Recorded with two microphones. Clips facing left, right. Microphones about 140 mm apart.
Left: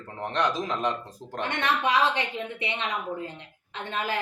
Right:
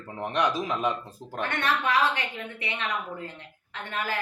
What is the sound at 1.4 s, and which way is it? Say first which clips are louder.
A woman's voice: left 1 dB; 20° left (ahead or behind).